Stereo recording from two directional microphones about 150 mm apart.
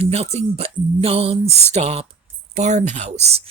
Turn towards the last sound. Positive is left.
turn(degrees=-45)  # may be behind; listen again after turning